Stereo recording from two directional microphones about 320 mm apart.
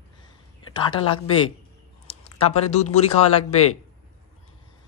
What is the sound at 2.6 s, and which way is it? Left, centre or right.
Speech, centre.